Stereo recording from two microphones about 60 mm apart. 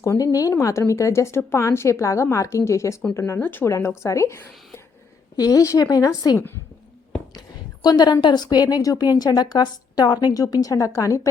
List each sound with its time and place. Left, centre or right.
0.2 s a woman's voice: left
0.6 s a woman's voice: left
3.3 s speech: left
3.7 s speech: left
5.4 s a woman's voice: left
7.9 s a woman's voice: left